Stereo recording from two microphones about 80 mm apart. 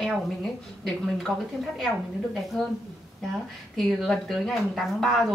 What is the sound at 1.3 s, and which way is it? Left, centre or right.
Speech, centre.